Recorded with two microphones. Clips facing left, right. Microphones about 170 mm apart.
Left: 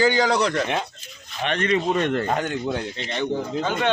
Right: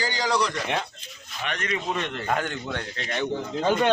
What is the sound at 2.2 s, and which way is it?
Speech, 25° left (ahead or behind).